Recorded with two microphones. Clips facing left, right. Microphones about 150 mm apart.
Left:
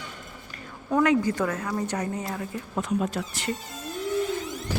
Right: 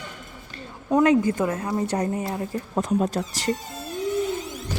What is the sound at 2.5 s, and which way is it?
Speech, 35° right (ahead or behind).